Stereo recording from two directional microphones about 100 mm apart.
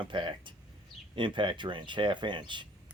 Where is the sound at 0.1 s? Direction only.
55° right (ahead or behind).